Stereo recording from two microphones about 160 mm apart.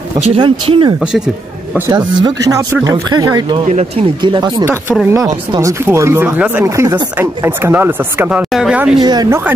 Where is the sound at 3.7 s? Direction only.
45° right (ahead or behind).